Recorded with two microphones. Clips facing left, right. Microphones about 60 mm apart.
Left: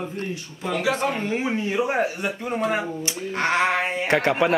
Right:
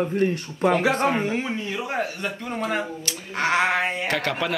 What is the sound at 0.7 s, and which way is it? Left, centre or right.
Speech, right.